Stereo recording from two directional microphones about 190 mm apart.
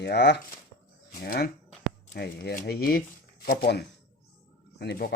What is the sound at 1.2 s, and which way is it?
Speech, 55° left (ahead or behind).